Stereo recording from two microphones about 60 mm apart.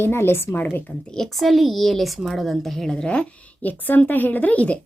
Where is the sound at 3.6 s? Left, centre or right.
Left.